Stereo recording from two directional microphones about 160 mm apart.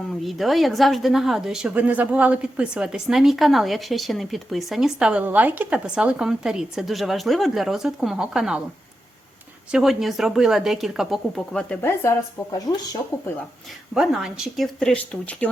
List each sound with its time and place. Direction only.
0.1 s a woman's voice: centre (ahead or behind)
9.7 s a woman's voice: centre (ahead or behind); by 13.4 s 20° left (ahead or behind)
13.9 s a woman's voice: 5° right (ahead or behind)